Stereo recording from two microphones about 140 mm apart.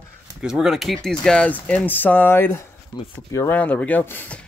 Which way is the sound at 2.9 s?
25° left (ahead or behind).